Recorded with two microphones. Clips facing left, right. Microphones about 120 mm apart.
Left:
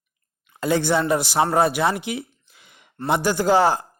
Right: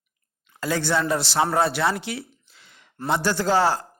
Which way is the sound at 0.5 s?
20° left (ahead or behind).